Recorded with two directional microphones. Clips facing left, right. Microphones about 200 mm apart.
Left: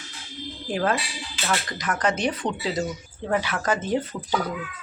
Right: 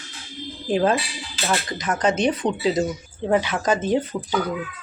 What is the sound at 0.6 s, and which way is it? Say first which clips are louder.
Speech: right 5 dB; 20° right (ahead or behind).